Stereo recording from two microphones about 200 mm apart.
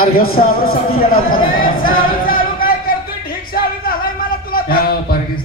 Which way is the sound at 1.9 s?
45° left (ahead or behind).